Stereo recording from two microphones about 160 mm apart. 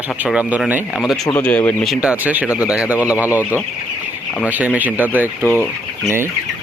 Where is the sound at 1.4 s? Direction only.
10° left (ahead or behind).